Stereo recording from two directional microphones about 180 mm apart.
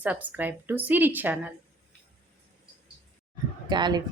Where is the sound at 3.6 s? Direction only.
25° right (ahead or behind).